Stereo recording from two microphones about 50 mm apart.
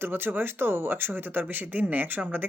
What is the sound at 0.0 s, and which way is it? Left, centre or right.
Speech, right.